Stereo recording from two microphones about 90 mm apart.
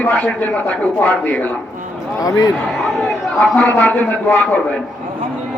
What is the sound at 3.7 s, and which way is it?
Speech, 20° left (ahead or behind).